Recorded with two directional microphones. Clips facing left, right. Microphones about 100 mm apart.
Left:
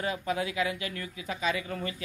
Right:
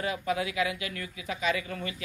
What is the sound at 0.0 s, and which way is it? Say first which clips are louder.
Speech: right 1 dB; 30° left (ahead or behind).